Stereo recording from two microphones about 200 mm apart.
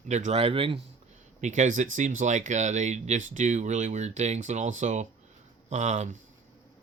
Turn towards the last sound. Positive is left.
turn(degrees=-35)  # may be behind; listen again after turning